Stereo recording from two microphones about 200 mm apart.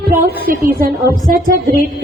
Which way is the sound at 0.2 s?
50° right (ahead or behind).